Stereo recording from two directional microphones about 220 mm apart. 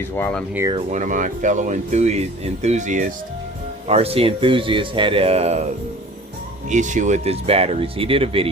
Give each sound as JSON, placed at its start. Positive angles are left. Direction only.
{"t": 0.0, "sound": "speech", "side_deg": 10}
{"t": 0.7, "sound": "speech", "side_deg": -30}
{"t": 6.7, "sound": "speech", "side_deg": -35}